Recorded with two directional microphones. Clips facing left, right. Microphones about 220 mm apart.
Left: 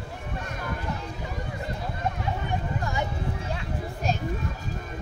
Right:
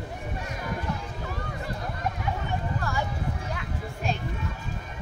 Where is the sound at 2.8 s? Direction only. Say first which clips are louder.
Left 1 dB; 20° left (ahead or behind).